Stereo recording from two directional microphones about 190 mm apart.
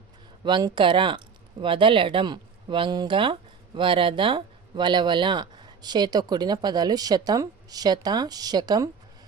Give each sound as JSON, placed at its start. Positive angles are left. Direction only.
{"t": 0.4, "sound": "speech", "side_deg": -25}